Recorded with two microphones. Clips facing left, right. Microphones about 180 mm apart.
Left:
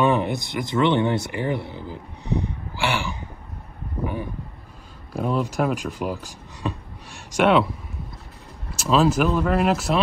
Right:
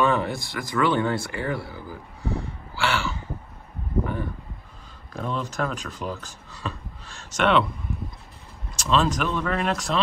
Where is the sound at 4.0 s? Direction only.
10° left (ahead or behind).